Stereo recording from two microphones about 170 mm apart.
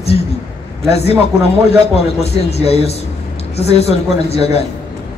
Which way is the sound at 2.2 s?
35° left (ahead or behind).